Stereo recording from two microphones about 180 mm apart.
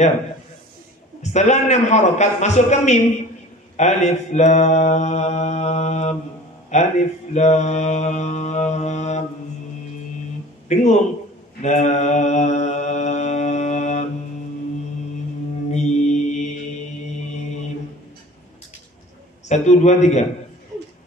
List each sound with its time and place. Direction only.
1.2 s mantra: 40° left (ahead or behind)
10.7 s speech: 40° left (ahead or behind)
11.6 s mantra: 40° left (ahead or behind)
15.7 s mantra: 40° left (ahead or behind)
17.4 s mantra: 40° left (ahead or behind)
19.4 s mantra: 40° left (ahead or behind)